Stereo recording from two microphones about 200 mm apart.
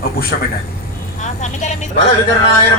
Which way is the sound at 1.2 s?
35° left (ahead or behind).